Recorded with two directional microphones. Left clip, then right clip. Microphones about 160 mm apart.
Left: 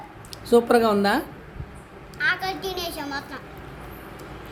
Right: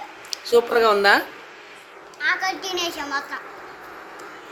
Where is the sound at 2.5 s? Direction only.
90° left.